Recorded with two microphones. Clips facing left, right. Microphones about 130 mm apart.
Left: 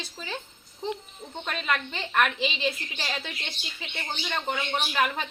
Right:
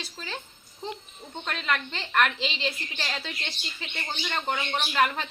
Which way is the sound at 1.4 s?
15° left (ahead or behind).